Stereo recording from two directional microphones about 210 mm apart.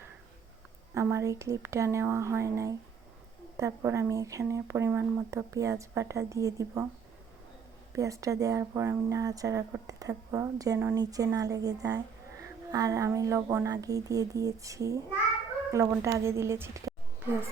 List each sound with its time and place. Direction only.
0.9 s speech: 15° right (ahead or behind)
7.9 s speech: 15° right (ahead or behind)